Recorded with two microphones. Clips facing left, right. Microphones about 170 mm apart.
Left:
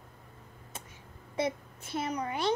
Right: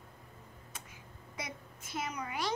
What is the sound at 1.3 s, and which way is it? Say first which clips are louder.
A child's voice: left 13 dB; 30° left (ahead or behind).